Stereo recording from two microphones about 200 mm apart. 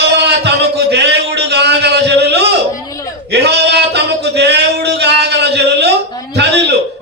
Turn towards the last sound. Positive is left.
turn(degrees=-60)  # may be behind; listen again after turning